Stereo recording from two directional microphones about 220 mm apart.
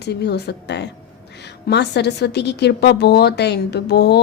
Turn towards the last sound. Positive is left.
turn(degrees=50)  # may be behind; listen again after turning